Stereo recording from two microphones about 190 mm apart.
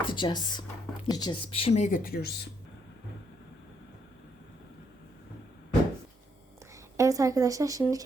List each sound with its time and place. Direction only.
0.0 s speech: 25° left (ahead or behind); by 2.5 s 55° left (ahead or behind)
6.9 s speech: 15° right (ahead or behind)